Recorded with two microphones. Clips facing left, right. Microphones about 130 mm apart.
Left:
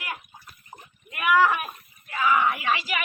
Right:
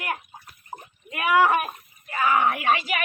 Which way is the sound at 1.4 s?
45° right (ahead or behind).